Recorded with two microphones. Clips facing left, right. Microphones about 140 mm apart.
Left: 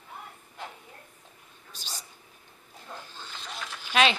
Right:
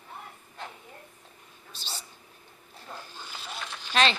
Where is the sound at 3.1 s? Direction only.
10° right (ahead or behind).